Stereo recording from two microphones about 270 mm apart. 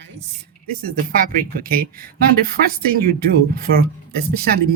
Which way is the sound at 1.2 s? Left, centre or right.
Right.